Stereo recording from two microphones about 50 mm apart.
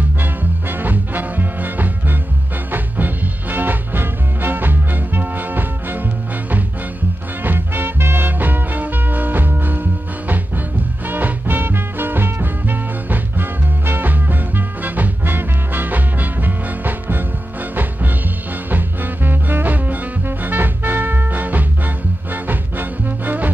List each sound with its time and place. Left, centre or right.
0.2 s swing music: right
2.7 s music: right
7.4 s music: right
18.7 s music: right